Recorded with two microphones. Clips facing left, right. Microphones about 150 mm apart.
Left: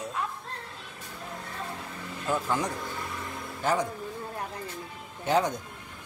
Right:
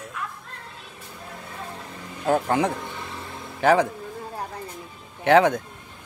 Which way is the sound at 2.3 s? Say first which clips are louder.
Right 7 dB; 60° right (ahead or behind).